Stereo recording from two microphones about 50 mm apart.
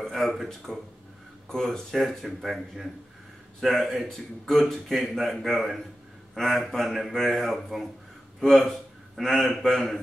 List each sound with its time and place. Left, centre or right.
0.0 s a man's voice: centre